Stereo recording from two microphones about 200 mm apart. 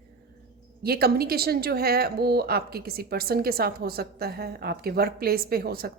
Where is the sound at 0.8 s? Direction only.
50° right (ahead or behind).